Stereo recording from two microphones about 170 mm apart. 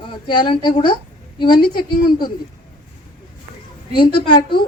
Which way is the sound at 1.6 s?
60° left (ahead or behind).